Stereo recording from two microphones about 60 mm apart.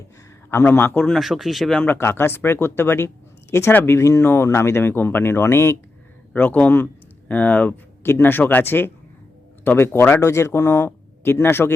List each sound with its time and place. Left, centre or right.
0.5 s speech: left
1.2 s speech: centre
2.0 s speech: left
4.2 s speech: left
6.3 s speech: left